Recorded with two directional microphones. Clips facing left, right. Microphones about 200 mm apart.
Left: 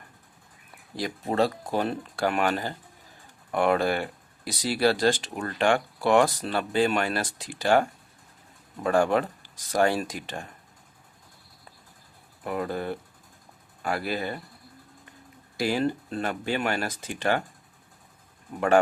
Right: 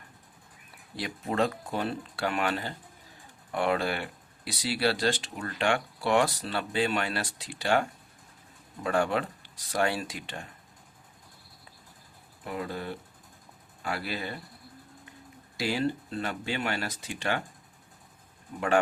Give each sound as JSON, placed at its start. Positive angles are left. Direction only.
{"t": 0.9, "sound": "speech", "side_deg": 40}
{"t": 12.5, "sound": "speech", "side_deg": 50}
{"t": 15.5, "sound": "speech", "side_deg": 50}
{"t": 18.5, "sound": "speech", "side_deg": 50}